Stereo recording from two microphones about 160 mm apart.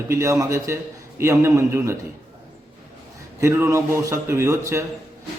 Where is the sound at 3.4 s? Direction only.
15° right (ahead or behind).